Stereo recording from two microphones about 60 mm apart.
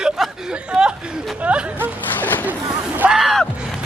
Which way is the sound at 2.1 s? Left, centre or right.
Left.